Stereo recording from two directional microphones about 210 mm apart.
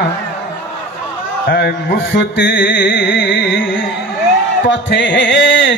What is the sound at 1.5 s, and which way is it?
Music, 50° left (ahead or behind).